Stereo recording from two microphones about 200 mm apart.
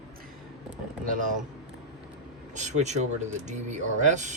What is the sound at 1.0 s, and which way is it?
Speech, 40° right (ahead or behind).